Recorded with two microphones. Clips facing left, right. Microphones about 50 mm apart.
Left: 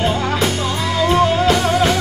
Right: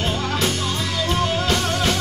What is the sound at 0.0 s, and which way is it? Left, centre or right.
Music, left.